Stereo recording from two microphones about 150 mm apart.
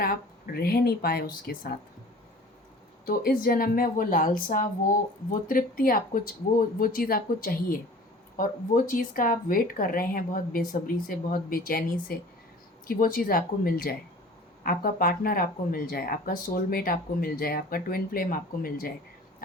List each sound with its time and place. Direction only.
0.0 s speech: 90° left
3.1 s speech: 75° left (ahead or behind)